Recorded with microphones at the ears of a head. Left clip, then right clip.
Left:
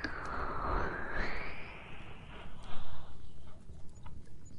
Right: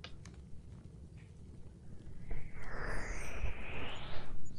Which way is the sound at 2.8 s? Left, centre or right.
Right.